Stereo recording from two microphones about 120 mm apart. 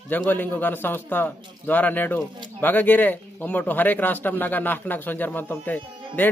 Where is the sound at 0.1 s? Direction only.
15° left (ahead or behind).